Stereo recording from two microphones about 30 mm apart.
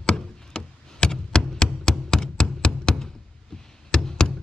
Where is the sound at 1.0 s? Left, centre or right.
Left.